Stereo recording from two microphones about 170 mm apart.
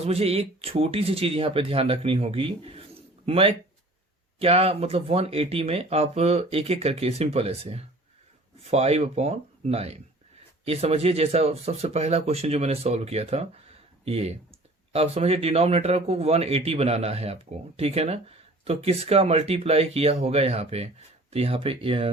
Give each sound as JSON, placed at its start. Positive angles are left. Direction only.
{"t": 0.0, "sound": "speech", "side_deg": -35}